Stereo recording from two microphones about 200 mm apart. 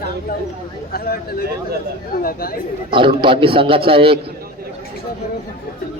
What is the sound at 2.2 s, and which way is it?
Speech, 45° left (ahead or behind).